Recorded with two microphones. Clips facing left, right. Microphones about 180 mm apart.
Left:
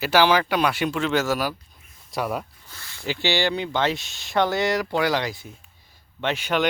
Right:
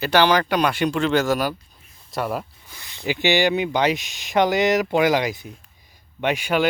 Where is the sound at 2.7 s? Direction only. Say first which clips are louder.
Right 1 dB; 15° right (ahead or behind).